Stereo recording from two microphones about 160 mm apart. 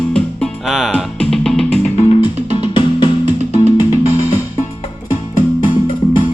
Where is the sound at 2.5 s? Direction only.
30° left (ahead or behind).